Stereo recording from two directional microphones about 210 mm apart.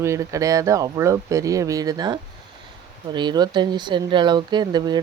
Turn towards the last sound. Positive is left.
turn(degrees=-20)  # may be behind; listen again after turning